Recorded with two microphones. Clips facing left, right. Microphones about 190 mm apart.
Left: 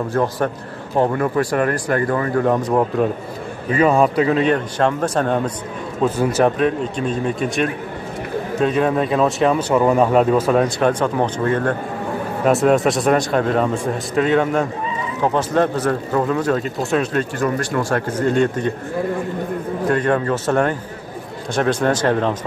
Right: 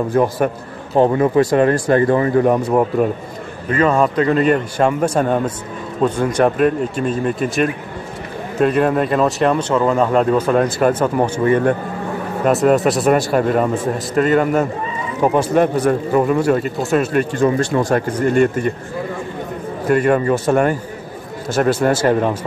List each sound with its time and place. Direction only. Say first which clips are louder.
0.1 s speech: right 3 dB; 15° right (ahead or behind)
3.7 s speech: even; 10° left (ahead or behind)
6.0 s speech: right 1 dB; 5° left (ahead or behind)
17.4 s speech: right 6 dB; 25° right (ahead or behind); by 18.7 s 10° right (ahead or behind)
19.9 s speech: right 4 dB; 10° right (ahead or behind)